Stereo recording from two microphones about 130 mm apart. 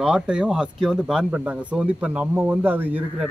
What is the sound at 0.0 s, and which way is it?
A man's voice, 5° right (ahead or behind).